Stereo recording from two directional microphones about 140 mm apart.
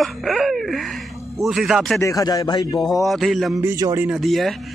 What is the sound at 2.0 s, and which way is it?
Speech, 25° left (ahead or behind).